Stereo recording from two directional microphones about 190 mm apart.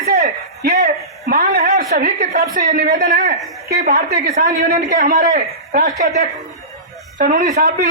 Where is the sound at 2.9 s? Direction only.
40° right (ahead or behind).